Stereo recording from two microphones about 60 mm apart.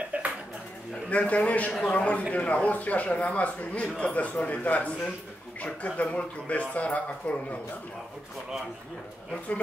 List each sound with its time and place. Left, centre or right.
0.1 s dishes: right
1.1 s a man's voice: left